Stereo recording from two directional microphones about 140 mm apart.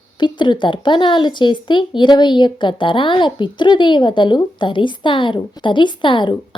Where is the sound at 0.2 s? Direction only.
35° left (ahead or behind).